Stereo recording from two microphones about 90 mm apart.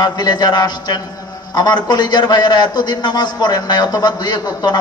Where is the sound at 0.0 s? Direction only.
50° left (ahead or behind).